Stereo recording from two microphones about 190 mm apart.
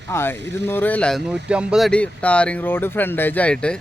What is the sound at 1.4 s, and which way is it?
Speech, 5° right (ahead or behind).